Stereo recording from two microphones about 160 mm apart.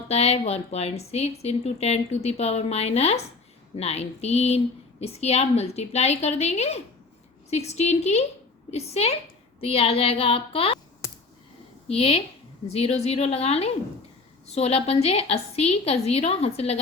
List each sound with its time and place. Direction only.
0.1 s a woman's voice: 40° left (ahead or behind)
11.9 s speech: 40° left (ahead or behind)